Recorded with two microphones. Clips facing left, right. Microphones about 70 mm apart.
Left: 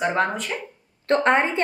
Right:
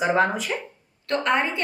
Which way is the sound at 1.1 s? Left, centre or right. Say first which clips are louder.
Left 4 dB; left.